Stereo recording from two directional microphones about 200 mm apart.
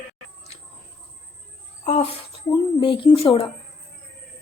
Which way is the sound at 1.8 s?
30° left (ahead or behind).